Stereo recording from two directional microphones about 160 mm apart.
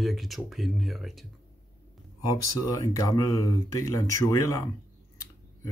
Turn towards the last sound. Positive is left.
turn(degrees=20)  # may be behind; listen again after turning